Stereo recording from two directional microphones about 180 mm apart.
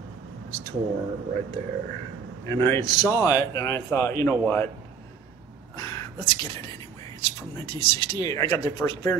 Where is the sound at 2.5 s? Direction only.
15° left (ahead or behind).